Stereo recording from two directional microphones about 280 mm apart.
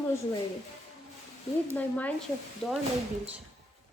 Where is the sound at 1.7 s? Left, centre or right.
Centre.